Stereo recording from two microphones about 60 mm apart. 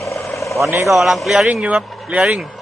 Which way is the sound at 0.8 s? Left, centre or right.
Centre.